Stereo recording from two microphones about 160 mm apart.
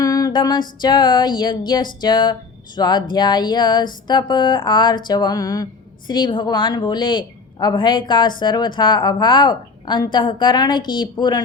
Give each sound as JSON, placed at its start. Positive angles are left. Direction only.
{"t": 0.0, "sound": "music", "side_deg": 25}
{"t": 0.8, "sound": "a woman's voice", "side_deg": 25}